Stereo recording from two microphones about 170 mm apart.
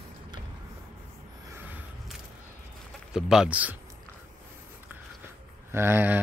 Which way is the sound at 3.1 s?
5° right (ahead or behind).